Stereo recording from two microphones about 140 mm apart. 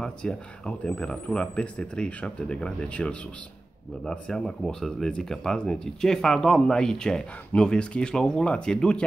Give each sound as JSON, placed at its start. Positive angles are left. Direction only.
{"t": 0.0, "sound": "speech", "side_deg": 5}